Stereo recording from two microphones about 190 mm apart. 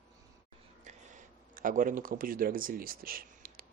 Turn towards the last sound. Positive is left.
turn(degrees=-50)  # may be behind; listen again after turning